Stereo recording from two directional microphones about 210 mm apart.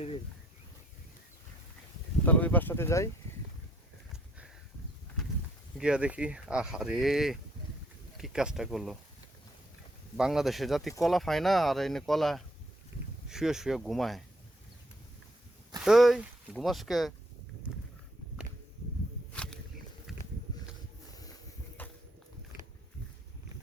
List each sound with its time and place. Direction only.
2.2 s speech: 10° left (ahead or behind)
5.7 s speech: 5° right (ahead or behind)
10.2 s speech: centre (ahead or behind)
15.8 s speech: centre (ahead or behind)
19.3 s a sound: 5° left (ahead or behind)
21.1 s a sound: 15° left (ahead or behind)